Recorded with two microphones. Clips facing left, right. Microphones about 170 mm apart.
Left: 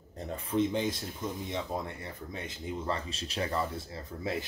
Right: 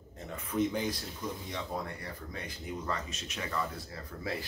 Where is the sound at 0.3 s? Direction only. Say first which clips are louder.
Left 2 dB; 30° left (ahead or behind).